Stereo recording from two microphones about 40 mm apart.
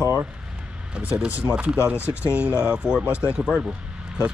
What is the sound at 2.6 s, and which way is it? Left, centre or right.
Speech, right.